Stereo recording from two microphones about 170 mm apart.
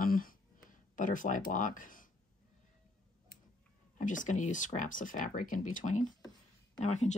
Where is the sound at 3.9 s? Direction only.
45° left (ahead or behind).